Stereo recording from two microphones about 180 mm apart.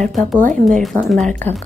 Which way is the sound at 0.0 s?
Centre (ahead or behind).